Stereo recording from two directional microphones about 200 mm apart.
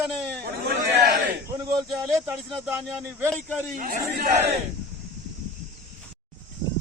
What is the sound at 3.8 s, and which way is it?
Speech, 40° right (ahead or behind).